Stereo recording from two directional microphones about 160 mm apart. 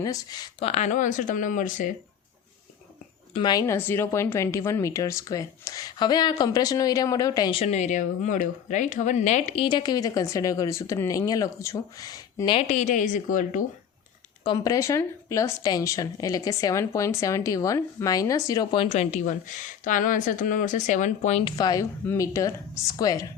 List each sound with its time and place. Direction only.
0.0 s speech: 25° left (ahead or behind)
0.6 s speech: 45° left (ahead or behind)
3.3 s speech: 25° left (ahead or behind)
7.6 s speech: 45° left (ahead or behind)
9.6 s speech: 30° left (ahead or behind)
12.5 s speech: 45° left (ahead or behind)
14.4 s speech: 25° left (ahead or behind); by 21.4 s 50° left (ahead or behind)
21.4 s speech: 25° left (ahead or behind)